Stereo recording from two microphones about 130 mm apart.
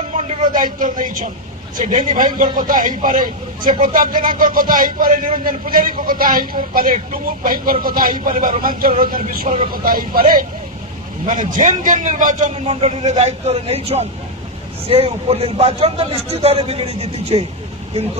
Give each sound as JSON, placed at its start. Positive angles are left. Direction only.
{"t": 0.1, "sound": "a man's voice", "side_deg": -70}